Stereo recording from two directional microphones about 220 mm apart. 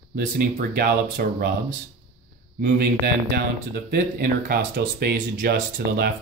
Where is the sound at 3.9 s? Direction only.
40° right (ahead or behind).